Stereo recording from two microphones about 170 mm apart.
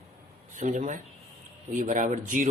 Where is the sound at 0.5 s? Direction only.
45° right (ahead or behind).